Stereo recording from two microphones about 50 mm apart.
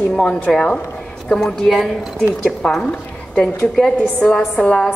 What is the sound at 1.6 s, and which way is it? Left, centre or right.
Speech, centre.